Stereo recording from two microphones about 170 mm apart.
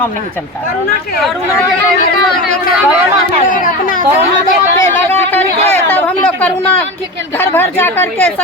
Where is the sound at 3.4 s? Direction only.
55° left (ahead or behind).